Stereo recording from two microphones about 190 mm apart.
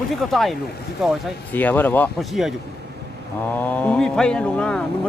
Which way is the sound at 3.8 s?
5° left (ahead or behind).